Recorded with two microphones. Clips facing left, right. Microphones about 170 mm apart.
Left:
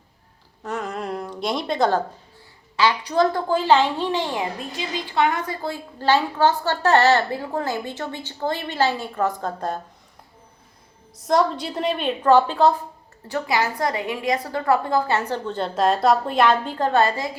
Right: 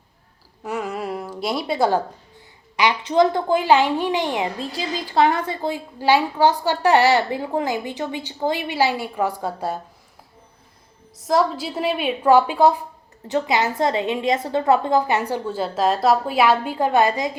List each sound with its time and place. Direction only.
0.6 s a woman's voice: 10° right (ahead or behind)
2.7 s a woman's voice: 20° right (ahead or behind)
4.7 s a woman's voice: 35° right (ahead or behind)
5.6 s a woman's voice: 15° right (ahead or behind)
11.2 s a woman's voice: centre (ahead or behind)